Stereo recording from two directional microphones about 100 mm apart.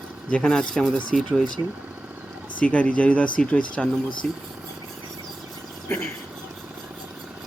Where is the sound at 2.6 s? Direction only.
15° left (ahead or behind).